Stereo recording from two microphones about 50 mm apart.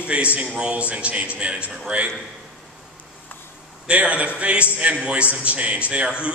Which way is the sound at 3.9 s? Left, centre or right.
Right.